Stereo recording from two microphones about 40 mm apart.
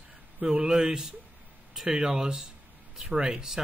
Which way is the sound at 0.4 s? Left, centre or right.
Centre.